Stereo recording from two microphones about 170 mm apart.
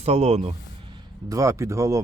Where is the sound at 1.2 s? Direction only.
20° right (ahead or behind).